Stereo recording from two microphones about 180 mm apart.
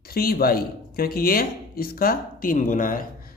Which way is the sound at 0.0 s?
60° left (ahead or behind).